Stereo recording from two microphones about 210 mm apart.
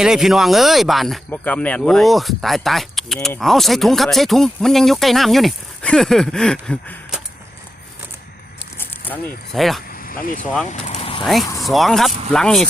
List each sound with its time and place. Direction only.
0.0 s speech: centre (ahead or behind)
8.8 s speech: 10° left (ahead or behind)
9.9 s vehicle: 40° left (ahead or behind)
11.6 s speech: centre (ahead or behind)